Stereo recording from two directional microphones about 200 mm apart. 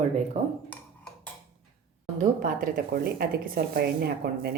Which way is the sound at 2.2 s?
40° right (ahead or behind).